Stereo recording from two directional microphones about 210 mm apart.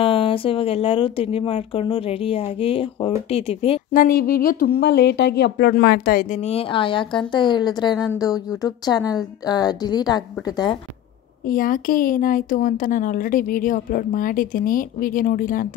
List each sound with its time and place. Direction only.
0.0 s a woman's voice: 25° left (ahead or behind)
3.9 s speech: 40° left (ahead or behind)
6.5 s a woman's voice: 25° left (ahead or behind)
11.4 s speech: 40° left (ahead or behind)